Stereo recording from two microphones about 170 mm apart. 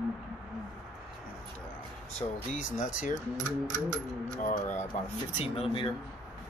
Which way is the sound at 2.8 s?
50° left (ahead or behind).